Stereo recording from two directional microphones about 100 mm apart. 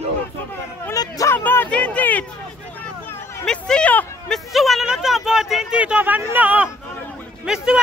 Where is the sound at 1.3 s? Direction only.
20° left (ahead or behind).